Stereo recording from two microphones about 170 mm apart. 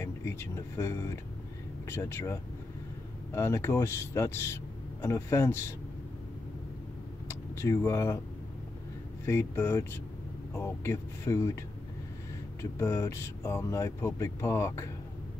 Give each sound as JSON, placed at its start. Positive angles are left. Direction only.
{"t": 0.0, "sound": "speech", "side_deg": 15}
{"t": 3.3, "sound": "speech", "side_deg": 15}
{"t": 7.2, "sound": "vehicle", "side_deg": 15}
{"t": 9.2, "sound": "speech", "side_deg": 15}
{"t": 12.7, "sound": "speech", "side_deg": 15}